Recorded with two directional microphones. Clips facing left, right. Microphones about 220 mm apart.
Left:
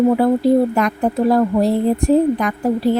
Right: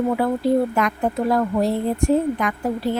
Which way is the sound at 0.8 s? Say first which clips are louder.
Left 4 dB; 35° left (ahead or behind).